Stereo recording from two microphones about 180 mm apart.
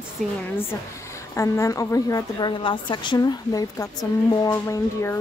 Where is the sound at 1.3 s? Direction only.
15° left (ahead or behind).